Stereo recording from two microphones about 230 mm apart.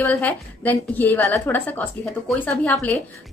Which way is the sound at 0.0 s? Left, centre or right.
Centre.